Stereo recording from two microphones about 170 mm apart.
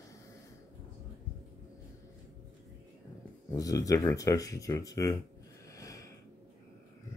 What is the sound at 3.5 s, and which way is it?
Speech, 20° left (ahead or behind).